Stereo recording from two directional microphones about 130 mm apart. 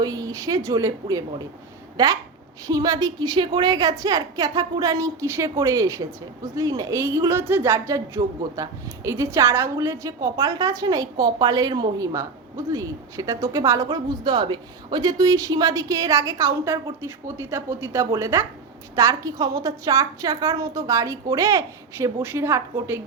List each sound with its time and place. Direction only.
0.0 s a woman's voice: 25° right (ahead or behind)